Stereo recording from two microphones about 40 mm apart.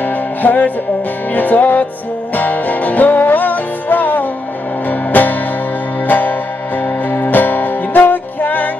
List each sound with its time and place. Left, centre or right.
0.0 s music: left